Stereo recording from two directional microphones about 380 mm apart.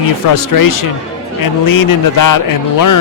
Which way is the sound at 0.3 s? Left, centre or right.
Left.